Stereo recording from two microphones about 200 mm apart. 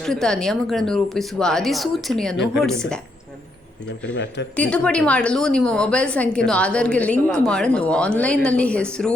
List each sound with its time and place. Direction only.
0.0 s a woman's voice: centre (ahead or behind)
4.1 s speech: 65° left (ahead or behind)
4.5 s a woman's voice: 5° left (ahead or behind)